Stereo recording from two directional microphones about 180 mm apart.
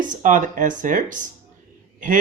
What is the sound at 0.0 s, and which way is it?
Speech, 45° right (ahead or behind).